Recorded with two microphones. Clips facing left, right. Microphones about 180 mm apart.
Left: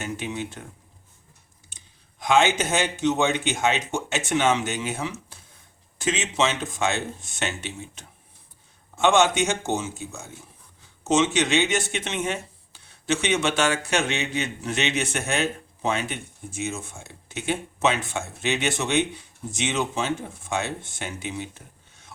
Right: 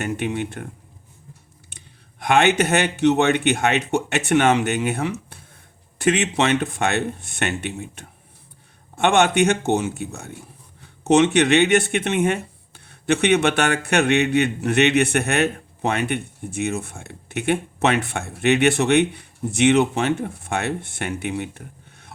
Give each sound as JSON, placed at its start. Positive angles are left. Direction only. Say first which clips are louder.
{"t": 0.0, "sound": "speech", "louder": "right 6 dB", "side_deg": -60}
{"t": 1.7, "sound": "speech", "louder": "right 8 dB", "side_deg": -60}